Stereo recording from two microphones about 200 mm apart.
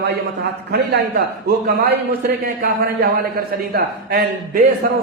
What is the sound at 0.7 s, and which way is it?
Speech, 60° right (ahead or behind).